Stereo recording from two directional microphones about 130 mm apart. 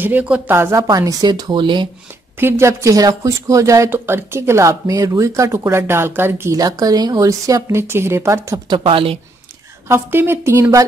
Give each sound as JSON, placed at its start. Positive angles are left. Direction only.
{"t": 0.0, "sound": "speech", "side_deg": -10}
{"t": 0.8, "sound": "speech", "side_deg": -30}
{"t": 2.4, "sound": "speech", "side_deg": -20}
{"t": 8.7, "sound": "speech", "side_deg": -45}
{"t": 9.8, "sound": "speech", "side_deg": -20}